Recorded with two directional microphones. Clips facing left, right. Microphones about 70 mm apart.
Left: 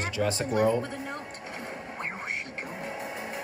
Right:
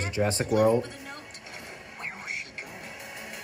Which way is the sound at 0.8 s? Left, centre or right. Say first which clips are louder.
Even; left.